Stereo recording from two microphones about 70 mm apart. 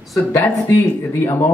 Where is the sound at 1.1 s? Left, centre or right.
Left.